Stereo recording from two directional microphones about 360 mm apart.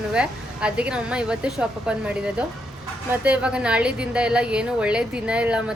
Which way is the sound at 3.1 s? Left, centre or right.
Centre.